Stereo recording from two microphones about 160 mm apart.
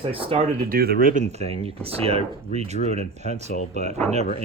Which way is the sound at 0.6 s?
75° right (ahead or behind).